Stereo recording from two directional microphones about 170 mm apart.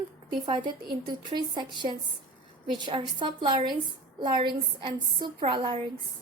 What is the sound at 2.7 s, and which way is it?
A woman's voice, 30° right (ahead or behind).